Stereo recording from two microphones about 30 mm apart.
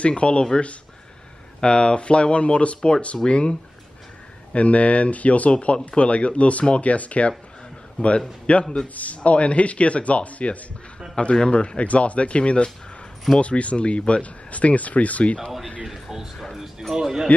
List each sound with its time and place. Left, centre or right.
0.0 s speech: left
1.6 s speech: left
4.5 s speech: left
5.5 s speech: left
8.0 s speech: left
11.2 s speech: left
14.5 s speech: left
15.8 s a sound: centre